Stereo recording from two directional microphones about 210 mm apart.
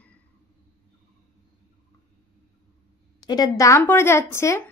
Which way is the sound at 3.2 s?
20° left (ahead or behind).